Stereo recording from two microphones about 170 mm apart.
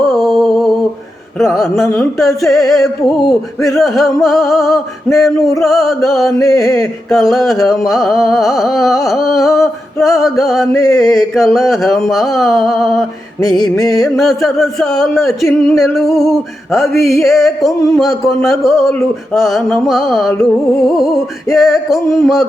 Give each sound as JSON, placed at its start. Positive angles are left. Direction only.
{"t": 0.0, "sound": "a sound", "side_deg": 0}
{"t": 1.4, "sound": "music", "side_deg": 0}
{"t": 10.7, "sound": "music", "side_deg": 20}
{"t": 10.9, "sound": "music", "side_deg": 0}
{"t": 16.8, "sound": "music", "side_deg": 15}
{"t": 17.2, "sound": "music", "side_deg": 0}